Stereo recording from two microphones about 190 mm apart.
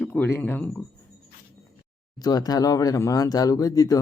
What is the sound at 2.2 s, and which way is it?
Speech, 20° left (ahead or behind).